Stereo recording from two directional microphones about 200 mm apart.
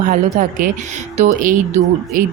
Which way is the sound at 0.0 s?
40° right (ahead or behind).